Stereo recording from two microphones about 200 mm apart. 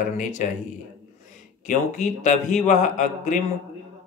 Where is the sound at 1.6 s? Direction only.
35° left (ahead or behind).